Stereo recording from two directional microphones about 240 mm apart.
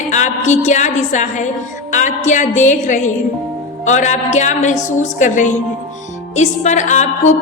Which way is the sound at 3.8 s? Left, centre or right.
Left.